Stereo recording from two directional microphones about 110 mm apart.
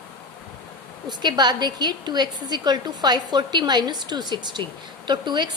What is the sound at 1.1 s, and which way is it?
A woman's voice, 40° right (ahead or behind).